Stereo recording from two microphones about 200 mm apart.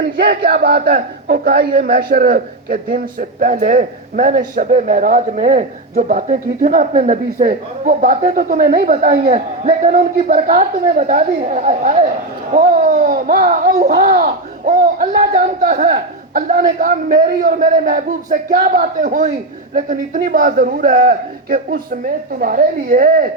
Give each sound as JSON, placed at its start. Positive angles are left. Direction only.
{"t": 0.0, "sound": "a man's voice", "side_deg": -50}